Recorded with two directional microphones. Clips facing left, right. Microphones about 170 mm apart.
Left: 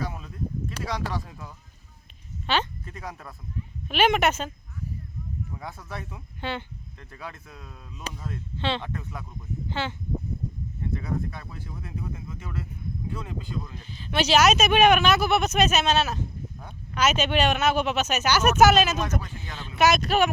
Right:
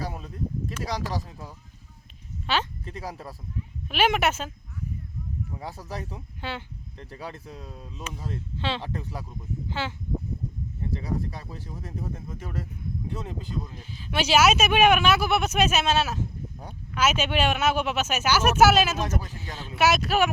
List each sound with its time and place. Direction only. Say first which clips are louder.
0.0 s a sound: left 1 dB; 35° right (ahead or behind)
0.8 s speech: even; 35° right (ahead or behind)
2.5 s speech: left 1 dB; 5° right (ahead or behind)
2.8 s speech: right 3 dB; 30° right (ahead or behind)
3.8 s speech: left 2 dB; 5° right (ahead or behind)
5.5 s speech: right 2 dB; 35° right (ahead or behind)
6.4 s speech: left 3 dB; 5° right (ahead or behind)
7.0 s speech: right 3 dB; 35° right (ahead or behind)
8.5 s speech: left 2 dB; 5° right (ahead or behind)
8.8 s speech: right 1 dB; 35° right (ahead or behind)
9.6 s speech: left 1 dB; 5° right (ahead or behind)
10.9 s speech: even; 35° right (ahead or behind)
13.9 s speech: left 1 dB; 5° right (ahead or behind)